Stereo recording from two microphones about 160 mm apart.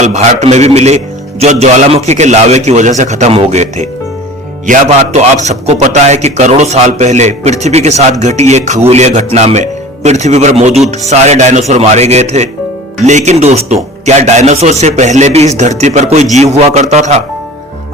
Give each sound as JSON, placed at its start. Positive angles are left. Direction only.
{"t": 0.0, "sound": "a man's voice", "side_deg": -45}